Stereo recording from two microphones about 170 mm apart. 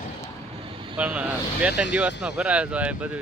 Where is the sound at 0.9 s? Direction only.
5° right (ahead or behind).